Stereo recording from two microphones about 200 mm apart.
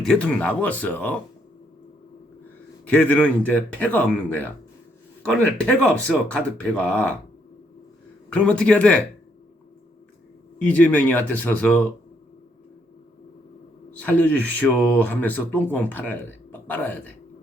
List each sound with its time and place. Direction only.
0.0 s speech: 5° left (ahead or behind)
2.9 s speech: 10° left (ahead or behind)
8.3 s speech: 5° left (ahead or behind)
10.6 s speech: 5° left (ahead or behind)
13.9 s speech: 10° left (ahead or behind)